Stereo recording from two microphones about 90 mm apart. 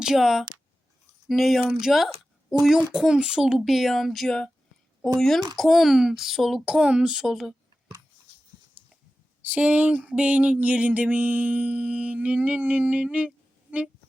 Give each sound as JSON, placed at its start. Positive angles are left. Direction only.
{"t": 0.0, "sound": "speech", "side_deg": -5}
{"t": 5.5, "sound": "speech", "side_deg": 0}
{"t": 9.4, "sound": "a sound", "side_deg": -15}